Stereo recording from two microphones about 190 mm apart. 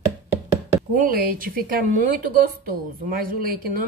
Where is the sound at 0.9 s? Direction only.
50° right (ahead or behind).